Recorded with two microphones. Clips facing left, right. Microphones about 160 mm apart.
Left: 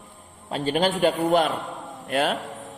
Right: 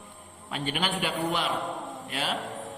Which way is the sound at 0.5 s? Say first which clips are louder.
Left 8 dB; 40° left (ahead or behind).